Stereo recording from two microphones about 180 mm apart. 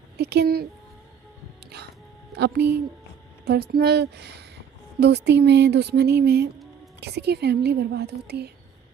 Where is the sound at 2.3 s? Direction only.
65° right (ahead or behind).